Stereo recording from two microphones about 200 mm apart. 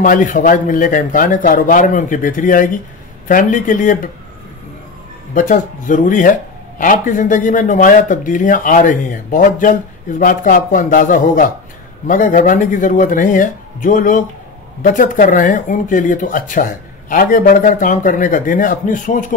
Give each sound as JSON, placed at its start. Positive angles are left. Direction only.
{"t": 0.0, "sound": "speech", "side_deg": 40}
{"t": 5.3, "sound": "speech", "side_deg": 40}